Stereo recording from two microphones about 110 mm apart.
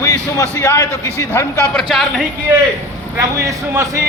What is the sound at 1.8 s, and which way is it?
Speech, centre (ahead or behind).